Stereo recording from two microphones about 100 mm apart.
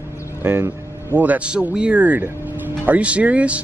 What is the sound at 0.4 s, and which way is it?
Speech, 20° right (ahead or behind).